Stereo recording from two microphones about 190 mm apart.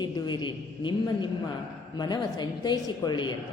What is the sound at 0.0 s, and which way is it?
A woman's voice, 25° left (ahead or behind).